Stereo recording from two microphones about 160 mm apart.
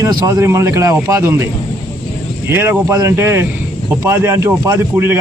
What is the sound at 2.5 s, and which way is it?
A man's voice, 15° right (ahead or behind).